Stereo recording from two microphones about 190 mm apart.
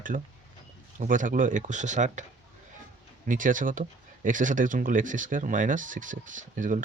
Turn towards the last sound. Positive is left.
turn(degrees=-45)  # may be behind; listen again after turning